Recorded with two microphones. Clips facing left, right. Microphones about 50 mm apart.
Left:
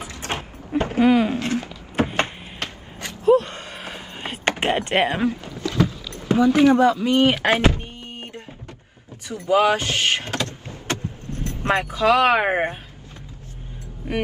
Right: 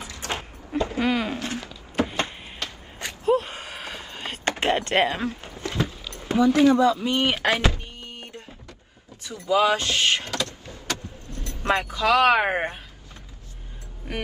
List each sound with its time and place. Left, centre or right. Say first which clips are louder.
0.0 s a sound: left 2 dB; left
1.0 s speech: left 9 dB; centre
1.4 s a sound: left 6 dB; left
3.3 s gasp: left 6 dB; centre
3.7 s vehicle: left 1 dB; centre
4.6 s speech: even; left
5.4 s vehicle: left 6 dB; right
6.1 s speech: left 2 dB; left
7.4 s thunk: left 4 dB; left
9.2 s power windows: left 3 dB; left